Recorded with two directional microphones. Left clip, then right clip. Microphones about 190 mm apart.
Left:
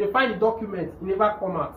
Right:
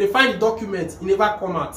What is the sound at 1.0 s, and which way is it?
Speech, 5° right (ahead or behind).